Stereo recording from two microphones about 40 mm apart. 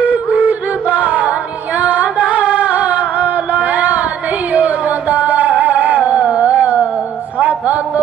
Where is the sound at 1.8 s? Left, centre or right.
Right.